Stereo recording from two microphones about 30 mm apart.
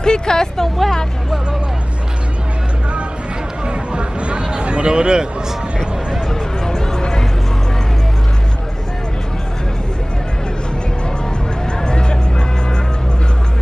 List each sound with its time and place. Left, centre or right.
0.0 s speech: left
0.6 s speech: centre
3.6 s a sound: right
6.6 s music: left
11.8 s music: left